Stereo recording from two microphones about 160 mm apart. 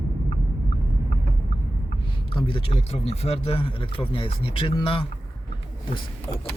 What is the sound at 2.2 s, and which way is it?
Speech, 30° left (ahead or behind).